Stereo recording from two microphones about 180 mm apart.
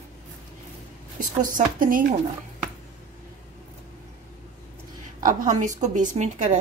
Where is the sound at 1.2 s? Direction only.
50° right (ahead or behind).